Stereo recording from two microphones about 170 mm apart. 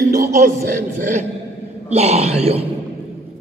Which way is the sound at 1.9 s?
40° right (ahead or behind).